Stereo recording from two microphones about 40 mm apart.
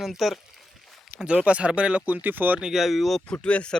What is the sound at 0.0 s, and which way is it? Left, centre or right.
Speech, centre.